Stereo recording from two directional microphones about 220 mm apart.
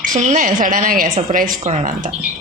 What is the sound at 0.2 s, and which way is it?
A woman's voice, 35° right (ahead or behind).